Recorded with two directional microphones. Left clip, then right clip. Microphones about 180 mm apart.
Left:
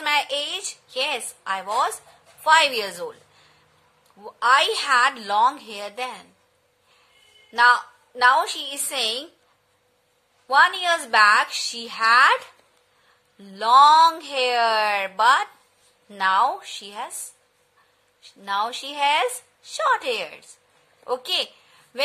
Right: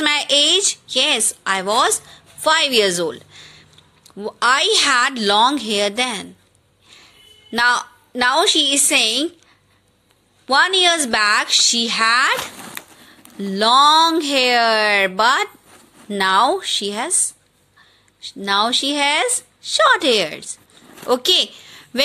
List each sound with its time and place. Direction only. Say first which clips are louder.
0.0 s a woman's voice: right 7 dB; 25° right (ahead or behind)
4.2 s a woman's voice: right 2 dB; 25° right (ahead or behind)
7.5 s a woman's voice: even; 30° right (ahead or behind)
10.5 s a woman's voice: right 3 dB; 25° right (ahead or behind)
13.4 s a woman's voice: right 1 dB; 30° right (ahead or behind)
18.2 s a woman's voice: right 7 dB; 25° right (ahead or behind)